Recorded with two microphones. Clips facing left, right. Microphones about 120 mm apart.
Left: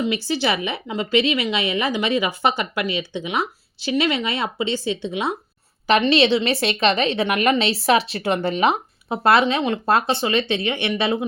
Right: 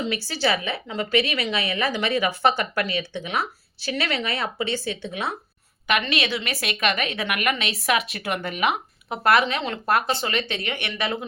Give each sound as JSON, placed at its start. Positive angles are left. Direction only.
{"t": 0.0, "sound": "a woman's voice", "side_deg": 15}